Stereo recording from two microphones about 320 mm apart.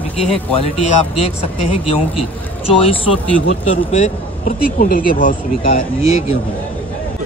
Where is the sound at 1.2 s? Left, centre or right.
Centre.